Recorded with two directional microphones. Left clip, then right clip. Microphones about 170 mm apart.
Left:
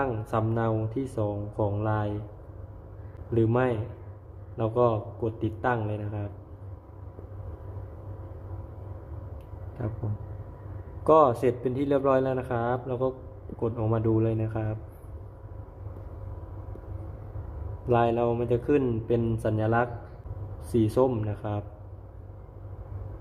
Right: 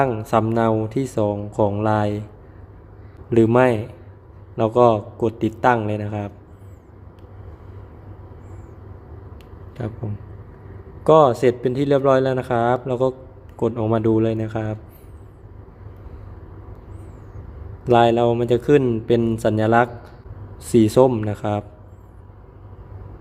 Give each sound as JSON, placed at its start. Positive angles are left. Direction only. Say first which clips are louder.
{"t": 0.0, "sound": "speech", "louder": "right 10 dB", "side_deg": -35}
{"t": 3.3, "sound": "speech", "louder": "right 10 dB", "side_deg": -40}
{"t": 11.0, "sound": "a man's voice", "louder": "right 7 dB", "side_deg": -25}
{"t": 17.8, "sound": "speech", "louder": "right 9 dB", "side_deg": -30}